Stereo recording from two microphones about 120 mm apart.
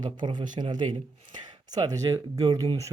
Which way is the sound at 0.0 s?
40° right (ahead or behind).